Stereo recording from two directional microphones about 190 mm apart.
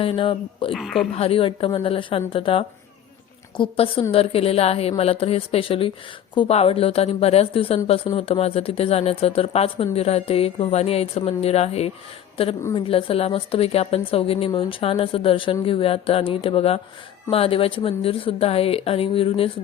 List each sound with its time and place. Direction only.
0.0 s a woman's voice: 30° left (ahead or behind)
0.7 s speech: centre (ahead or behind)
1.1 s a woman's voice: 30° left (ahead or behind)